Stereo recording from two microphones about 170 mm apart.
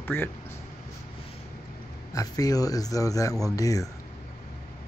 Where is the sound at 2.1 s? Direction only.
20° left (ahead or behind).